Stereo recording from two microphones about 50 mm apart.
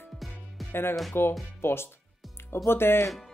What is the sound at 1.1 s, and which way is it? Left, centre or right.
Speech, left.